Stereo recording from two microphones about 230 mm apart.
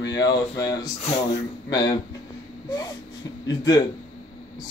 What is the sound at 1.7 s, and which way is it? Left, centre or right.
Speech, centre.